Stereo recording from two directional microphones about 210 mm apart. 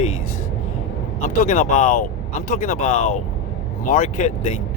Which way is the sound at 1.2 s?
35° left (ahead or behind).